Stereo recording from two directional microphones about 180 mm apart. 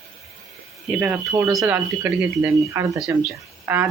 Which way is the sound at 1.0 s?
5° right (ahead or behind).